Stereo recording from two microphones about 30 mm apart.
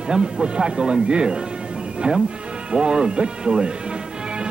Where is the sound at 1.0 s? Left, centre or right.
Right.